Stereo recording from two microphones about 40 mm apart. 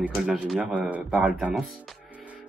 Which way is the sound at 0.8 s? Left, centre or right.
Right.